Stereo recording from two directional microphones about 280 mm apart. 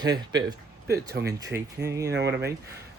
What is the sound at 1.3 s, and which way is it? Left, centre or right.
Speech, centre.